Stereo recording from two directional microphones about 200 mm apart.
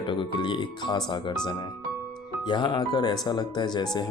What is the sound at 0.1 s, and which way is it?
Speech, 25° left (ahead or behind).